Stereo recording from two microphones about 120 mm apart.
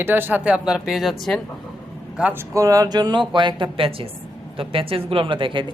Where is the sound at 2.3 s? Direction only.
25° right (ahead or behind).